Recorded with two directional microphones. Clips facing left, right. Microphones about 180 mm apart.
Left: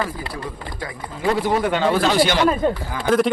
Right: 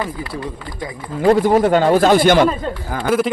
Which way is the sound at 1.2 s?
45° right (ahead or behind).